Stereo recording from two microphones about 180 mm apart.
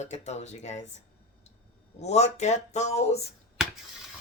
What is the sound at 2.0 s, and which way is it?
Speech, 40° left (ahead or behind).